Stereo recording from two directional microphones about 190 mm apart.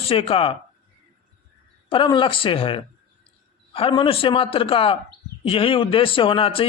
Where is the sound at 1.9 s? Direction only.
25° left (ahead or behind).